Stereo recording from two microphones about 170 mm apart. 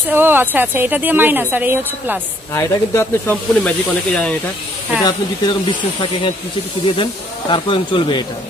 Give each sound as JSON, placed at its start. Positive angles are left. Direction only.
{"t": 0.1, "sound": "a woman's voice", "side_deg": -10}
{"t": 2.5, "sound": "speech", "side_deg": 15}
{"t": 5.0, "sound": "speech", "side_deg": 25}